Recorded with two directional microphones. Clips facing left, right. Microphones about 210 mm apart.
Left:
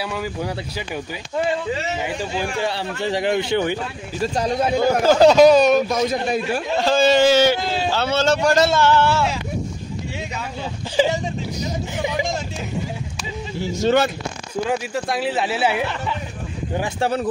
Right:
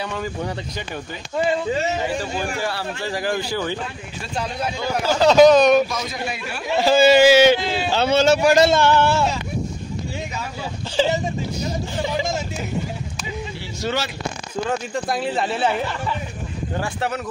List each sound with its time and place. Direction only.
0.0 s speech: 5° left (ahead or behind)
2.1 s a man's voice: 15° left (ahead or behind)
4.2 s speech: 40° left (ahead or behind)
5.3 s speech: 5° left (ahead or behind)
5.9 s speech: 45° left (ahead or behind)
6.8 s a man's voice: 10° right (ahead or behind)
11.0 s a sound: 10° left (ahead or behind)
14.7 s speech: 5° left (ahead or behind)
17.0 s speech: 30° left (ahead or behind)